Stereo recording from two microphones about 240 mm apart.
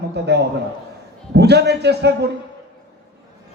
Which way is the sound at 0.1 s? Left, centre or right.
Right.